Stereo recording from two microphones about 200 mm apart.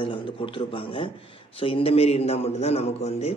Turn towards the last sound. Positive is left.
turn(degrees=30)  # may be behind; listen again after turning